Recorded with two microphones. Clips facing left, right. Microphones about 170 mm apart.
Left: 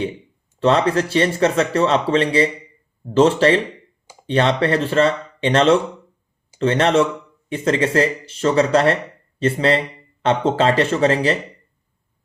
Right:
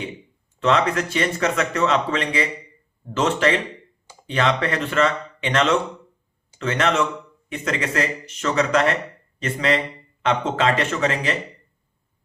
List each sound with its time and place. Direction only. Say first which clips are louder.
0.6 s speech: left 4 dB; 30° left (ahead or behind)